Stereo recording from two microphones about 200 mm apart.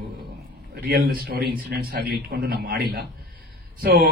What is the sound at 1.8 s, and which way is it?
A man's voice, 50° right (ahead or behind).